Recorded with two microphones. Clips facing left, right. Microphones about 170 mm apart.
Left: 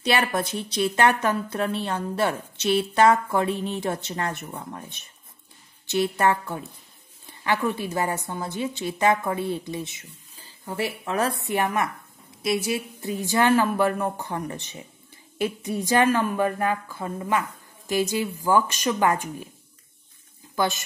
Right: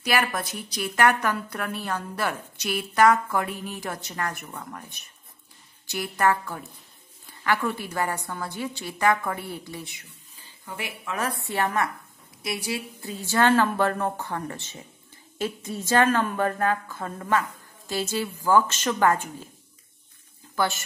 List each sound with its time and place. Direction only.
0.0 s a woman's voice: 25° left (ahead or behind)
10.3 s a woman's voice: 35° left (ahead or behind)
11.3 s a woman's voice: 20° left (ahead or behind)
20.5 s speech: 20° left (ahead or behind)